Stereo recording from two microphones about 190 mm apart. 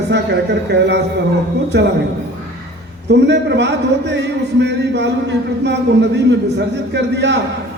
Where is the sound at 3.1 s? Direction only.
65° right (ahead or behind).